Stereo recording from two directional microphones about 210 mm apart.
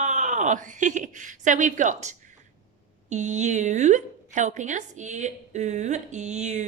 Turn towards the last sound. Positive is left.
turn(degrees=-35)  # may be behind; listen again after turning